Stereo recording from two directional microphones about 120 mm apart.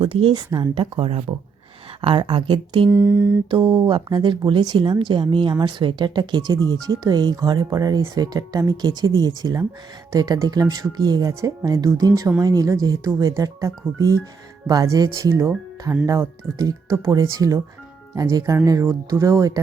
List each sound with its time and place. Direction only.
0.0 s speech: 50° right (ahead or behind)
0.3 s speech: 35° right (ahead or behind)
0.7 s speech: 50° right (ahead or behind)
2.9 s a sound: 20° right (ahead or behind)
3.5 s speech: 40° right (ahead or behind)